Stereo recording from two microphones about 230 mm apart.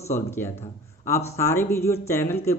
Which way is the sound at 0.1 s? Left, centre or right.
Centre.